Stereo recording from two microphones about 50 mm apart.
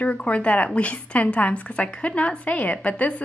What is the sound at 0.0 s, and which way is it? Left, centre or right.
A woman's voice, left.